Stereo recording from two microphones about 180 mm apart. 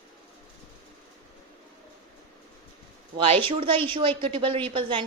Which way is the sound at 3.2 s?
30° right (ahead or behind).